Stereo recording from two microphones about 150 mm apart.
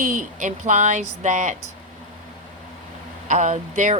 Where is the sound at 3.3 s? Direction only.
55° right (ahead or behind).